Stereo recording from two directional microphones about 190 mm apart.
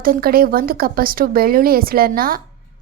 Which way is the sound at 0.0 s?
50° right (ahead or behind).